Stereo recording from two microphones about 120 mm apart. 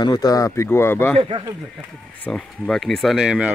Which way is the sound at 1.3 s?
40° right (ahead or behind).